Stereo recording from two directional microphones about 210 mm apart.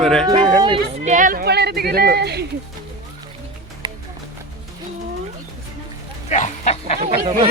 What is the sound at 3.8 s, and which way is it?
Music, 20° right (ahead or behind).